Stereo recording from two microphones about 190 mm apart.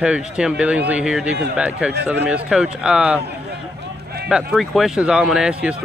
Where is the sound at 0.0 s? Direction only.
5° right (ahead or behind).